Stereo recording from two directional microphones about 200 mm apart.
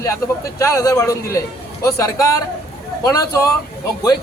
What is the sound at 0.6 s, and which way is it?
A man's voice, 15° left (ahead or behind).